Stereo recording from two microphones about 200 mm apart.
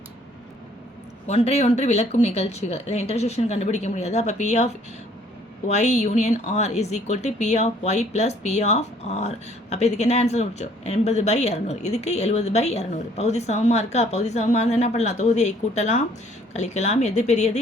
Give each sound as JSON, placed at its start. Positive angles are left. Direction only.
{"t": 1.3, "sound": "speech", "side_deg": 30}